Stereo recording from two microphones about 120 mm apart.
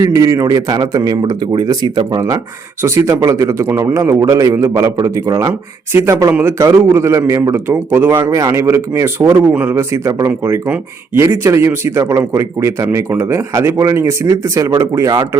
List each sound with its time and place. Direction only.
0.0 s speech: 25° right (ahead or behind)